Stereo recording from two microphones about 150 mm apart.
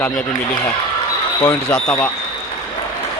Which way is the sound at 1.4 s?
15° left (ahead or behind).